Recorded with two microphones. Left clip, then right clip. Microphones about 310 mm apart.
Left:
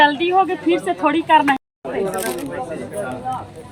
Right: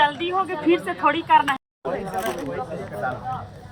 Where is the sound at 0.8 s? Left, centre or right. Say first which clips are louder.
Left 3 dB; left.